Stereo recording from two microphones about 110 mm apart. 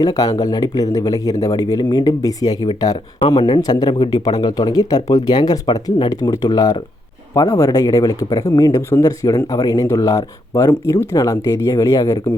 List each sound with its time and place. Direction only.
0.0 s speech: 35° left (ahead or behind)
3.2 s speech: 55° left (ahead or behind)
3.6 s speech: 40° left (ahead or behind)